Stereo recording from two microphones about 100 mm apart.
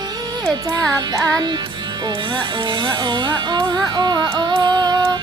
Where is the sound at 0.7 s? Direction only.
40° right (ahead or behind).